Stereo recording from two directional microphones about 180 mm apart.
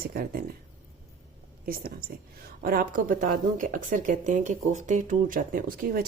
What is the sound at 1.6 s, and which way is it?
Speech, 55° right (ahead or behind).